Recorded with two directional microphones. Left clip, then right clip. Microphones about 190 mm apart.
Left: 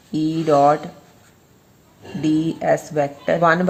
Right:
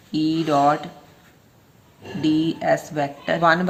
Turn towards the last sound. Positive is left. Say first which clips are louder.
# left 2 dB
turn(degrees=50)  # may be behind; listen again after turning